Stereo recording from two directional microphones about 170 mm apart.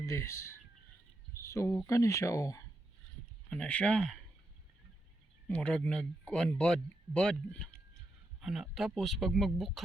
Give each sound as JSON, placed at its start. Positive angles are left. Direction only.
{"t": 0.0, "sound": "speech", "side_deg": 15}
{"t": 3.5, "sound": "speech", "side_deg": 5}
{"t": 5.5, "sound": "speech", "side_deg": 5}